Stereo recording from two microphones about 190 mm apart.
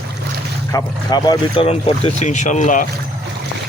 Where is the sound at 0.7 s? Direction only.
20° left (ahead or behind); by 2.8 s 40° left (ahead or behind).